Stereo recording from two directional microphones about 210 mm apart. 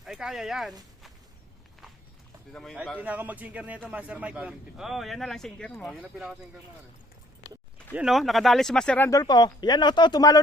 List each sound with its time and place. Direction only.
0.0 s speech: centre (ahead or behind)
2.5 s speech: 5° left (ahead or behind)
3.0 s a man's voice: 5° right (ahead or behind)
6.0 s a man's voice: 5° right (ahead or behind)
7.9 s speech: centre (ahead or behind); by 10.4 s 20° left (ahead or behind)